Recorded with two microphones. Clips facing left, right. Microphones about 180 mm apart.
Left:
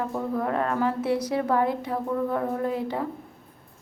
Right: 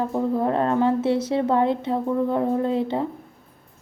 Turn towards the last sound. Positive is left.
turn(degrees=-25)  # may be behind; listen again after turning